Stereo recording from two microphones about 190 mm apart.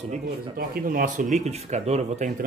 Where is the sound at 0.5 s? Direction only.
50° right (ahead or behind).